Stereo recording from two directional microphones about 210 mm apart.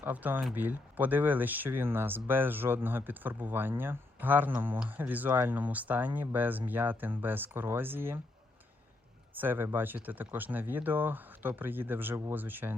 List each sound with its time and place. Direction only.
0.0 s speech: 10° right (ahead or behind)
9.3 s speech: 10° right (ahead or behind)